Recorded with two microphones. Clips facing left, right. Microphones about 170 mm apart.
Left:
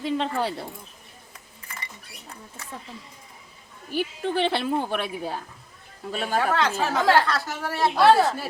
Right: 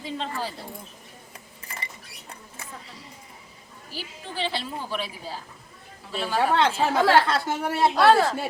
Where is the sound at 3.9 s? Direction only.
60° left (ahead or behind).